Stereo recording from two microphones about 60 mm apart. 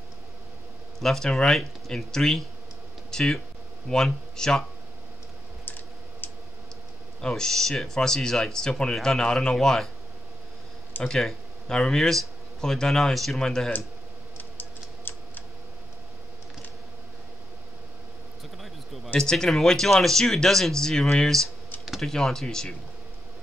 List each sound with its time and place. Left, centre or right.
0.9 s speech: centre
3.1 s a sound: centre
3.9 s speech: centre
5.7 s typing: left
7.2 s speech: centre
11.1 s speech: centre
14.3 s tick-tock: left
19.1 s speech: centre